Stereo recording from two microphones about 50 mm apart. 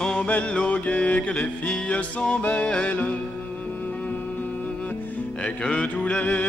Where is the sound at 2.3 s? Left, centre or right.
Left.